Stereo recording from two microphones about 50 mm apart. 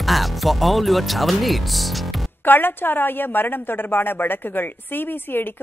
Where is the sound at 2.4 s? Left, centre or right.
Left.